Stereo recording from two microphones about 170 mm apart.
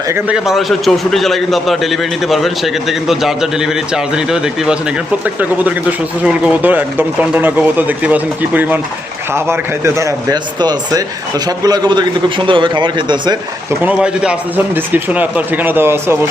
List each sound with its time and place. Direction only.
0.1 s a man's voice: 5° right (ahead or behind); by 13.3 s 25° right (ahead or behind)
13.8 s speech: 5° right (ahead or behind)